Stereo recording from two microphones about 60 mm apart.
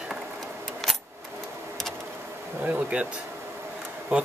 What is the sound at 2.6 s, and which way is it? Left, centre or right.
Speech, right.